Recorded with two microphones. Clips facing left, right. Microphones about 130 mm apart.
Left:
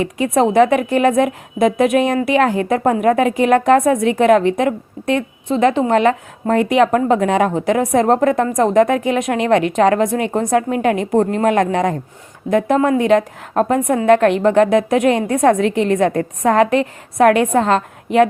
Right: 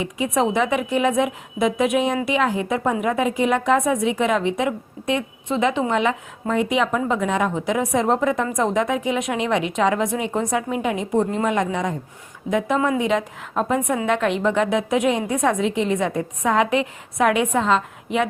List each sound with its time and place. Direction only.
0.3 s a woman's voice: 50° left (ahead or behind); by 11.9 s 70° left (ahead or behind)
12.5 s a woman's voice: 55° left (ahead or behind)